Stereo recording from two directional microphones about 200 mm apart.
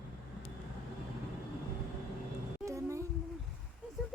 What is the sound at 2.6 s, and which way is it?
Music, 15° right (ahead or behind).